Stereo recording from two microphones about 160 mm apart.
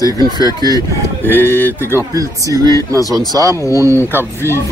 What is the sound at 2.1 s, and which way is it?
Speech, 20° right (ahead or behind).